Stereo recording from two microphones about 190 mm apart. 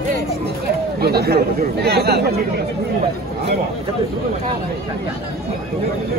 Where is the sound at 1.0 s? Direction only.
55° right (ahead or behind).